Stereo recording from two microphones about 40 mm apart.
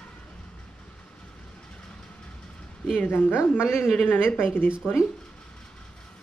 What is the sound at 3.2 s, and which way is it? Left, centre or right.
Speech, left.